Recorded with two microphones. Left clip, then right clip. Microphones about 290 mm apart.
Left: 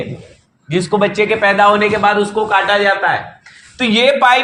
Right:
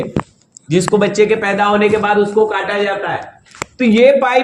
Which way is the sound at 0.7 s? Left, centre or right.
Left.